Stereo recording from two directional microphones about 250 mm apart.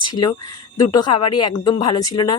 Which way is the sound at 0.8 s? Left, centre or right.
Centre.